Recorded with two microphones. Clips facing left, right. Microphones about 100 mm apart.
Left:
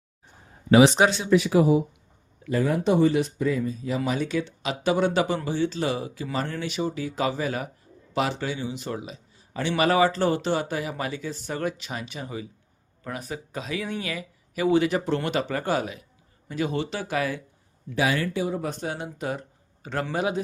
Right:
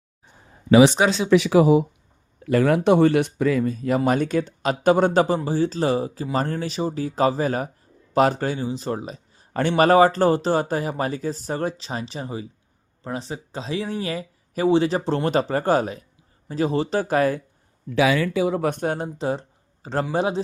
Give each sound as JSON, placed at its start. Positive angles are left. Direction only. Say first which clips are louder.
{"t": 1.1, "sound": "speech", "louder": "right 4 dB", "side_deg": -90}
{"t": 2.5, "sound": "speech", "louder": "right 5 dB", "side_deg": -75}
{"t": 9.5, "sound": "speech", "louder": "right 6 dB", "side_deg": -50}
{"t": 18.4, "sound": "speech", "louder": "right 7 dB", "side_deg": -80}
{"t": 18.9, "sound": "speech", "louder": "right 5 dB", "side_deg": -35}